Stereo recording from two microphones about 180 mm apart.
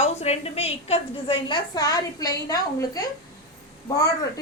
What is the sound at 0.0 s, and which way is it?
A woman's voice, 35° left (ahead or behind).